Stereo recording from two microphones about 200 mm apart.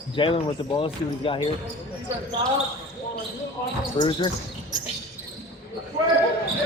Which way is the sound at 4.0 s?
25° left (ahead or behind).